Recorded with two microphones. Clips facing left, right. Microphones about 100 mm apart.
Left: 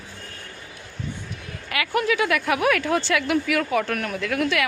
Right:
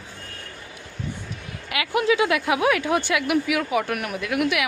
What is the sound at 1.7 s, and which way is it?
A woman's voice, 20° right (ahead or behind).